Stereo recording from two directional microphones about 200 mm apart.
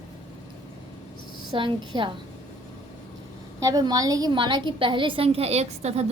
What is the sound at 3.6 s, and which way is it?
A woman's voice, 20° right (ahead or behind).